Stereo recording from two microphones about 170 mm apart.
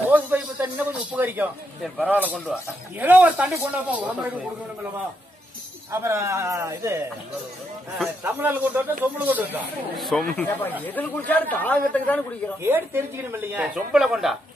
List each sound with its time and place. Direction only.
0.1 s speech: 10° right (ahead or behind)
2.1 s a man's voice: 10° left (ahead or behind)
3.0 s speech: 10° right (ahead or behind)
5.9 s speech: 15° right (ahead or behind)
8.2 s speech: 10° right (ahead or behind)
9.9 s speech: centre (ahead or behind)
10.3 s a man's voice: 10° left (ahead or behind)
12.6 s speech: 15° right (ahead or behind)